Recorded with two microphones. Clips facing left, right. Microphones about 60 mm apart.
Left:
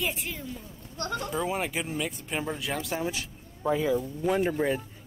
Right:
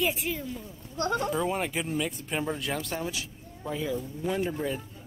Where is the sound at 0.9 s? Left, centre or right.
Right.